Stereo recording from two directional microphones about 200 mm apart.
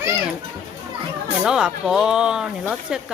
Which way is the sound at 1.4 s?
5° right (ahead or behind).